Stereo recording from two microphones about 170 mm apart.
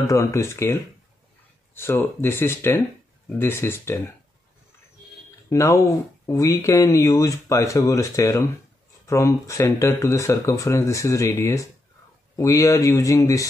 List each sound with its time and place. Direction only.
0.0 s speech: 20° left (ahead or behind)
1.8 s speech: 15° left (ahead or behind)
5.5 s speech: 15° left (ahead or behind)